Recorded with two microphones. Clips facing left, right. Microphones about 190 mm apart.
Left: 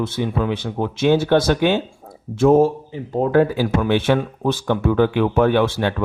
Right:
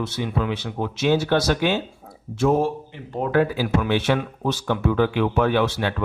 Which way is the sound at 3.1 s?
40° left (ahead or behind).